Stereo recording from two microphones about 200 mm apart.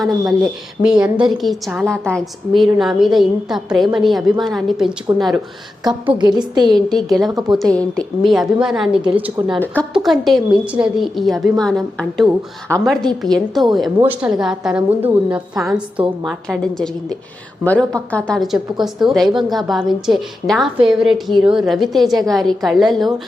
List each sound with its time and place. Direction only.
0.8 s a woman's voice: 5° right (ahead or behind)
5.9 s a woman's voice: 20° right (ahead or behind)
6.7 s a woman's voice: centre (ahead or behind)
7.3 s a woman's voice: 20° right (ahead or behind)
7.6 s a woman's voice: 5° left (ahead or behind)